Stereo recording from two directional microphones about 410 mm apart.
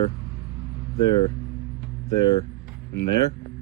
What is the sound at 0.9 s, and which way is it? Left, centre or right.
Speech, left.